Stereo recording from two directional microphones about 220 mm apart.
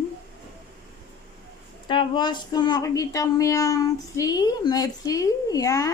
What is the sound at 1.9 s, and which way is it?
Speech, 20° left (ahead or behind).